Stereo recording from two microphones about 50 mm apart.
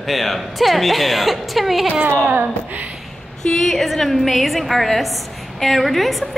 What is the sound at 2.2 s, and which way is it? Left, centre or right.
Speech, right.